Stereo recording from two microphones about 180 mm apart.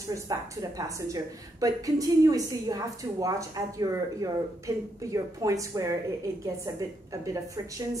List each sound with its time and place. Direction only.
0.1 s a woman's voice: 20° right (ahead or behind)